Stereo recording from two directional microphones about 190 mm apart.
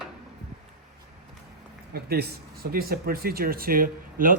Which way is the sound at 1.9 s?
55° right (ahead or behind).